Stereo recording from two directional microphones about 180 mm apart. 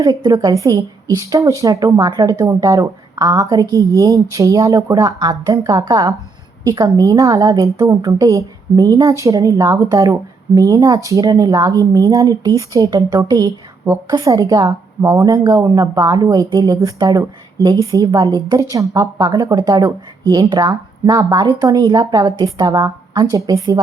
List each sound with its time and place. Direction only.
0.0 s a woman's voice: 20° right (ahead or behind)